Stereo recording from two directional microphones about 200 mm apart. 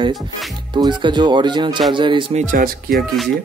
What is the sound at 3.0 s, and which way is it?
Speech, centre (ahead or behind).